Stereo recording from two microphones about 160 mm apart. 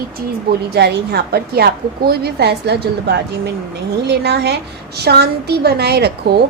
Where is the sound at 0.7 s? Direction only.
90° right.